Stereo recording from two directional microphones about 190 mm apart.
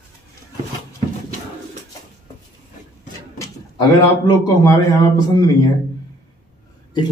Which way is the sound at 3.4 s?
15° left (ahead or behind).